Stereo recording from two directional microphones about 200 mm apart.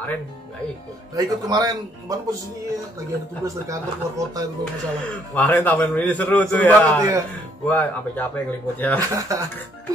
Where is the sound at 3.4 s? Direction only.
15° right (ahead or behind).